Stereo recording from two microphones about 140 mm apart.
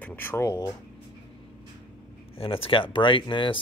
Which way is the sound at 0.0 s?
15° left (ahead or behind).